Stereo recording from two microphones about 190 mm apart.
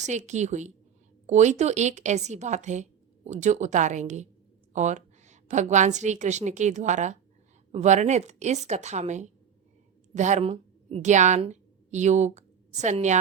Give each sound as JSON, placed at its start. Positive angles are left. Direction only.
{"t": 0.0, "sound": "a woman's voice", "side_deg": -40}